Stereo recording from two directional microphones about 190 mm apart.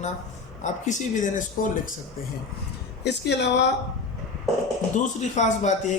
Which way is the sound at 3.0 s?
65° left (ahead or behind).